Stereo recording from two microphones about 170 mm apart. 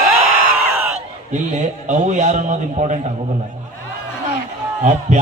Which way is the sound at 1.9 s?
45° right (ahead or behind).